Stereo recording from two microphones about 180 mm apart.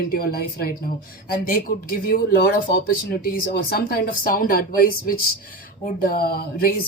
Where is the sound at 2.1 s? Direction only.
50° left (ahead or behind).